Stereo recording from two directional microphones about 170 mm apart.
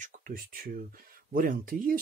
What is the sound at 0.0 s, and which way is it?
Speech, 55° right (ahead or behind).